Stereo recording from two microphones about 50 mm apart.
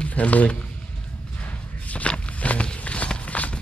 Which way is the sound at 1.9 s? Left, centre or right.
Left.